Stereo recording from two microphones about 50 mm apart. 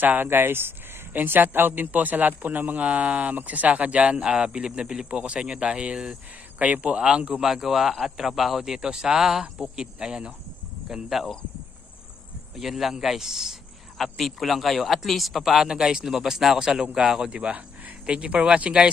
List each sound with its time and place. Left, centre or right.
0.0 s a man's voice: right
7.3 s speech: centre
12.5 s a man's voice: centre; by 18.6 s right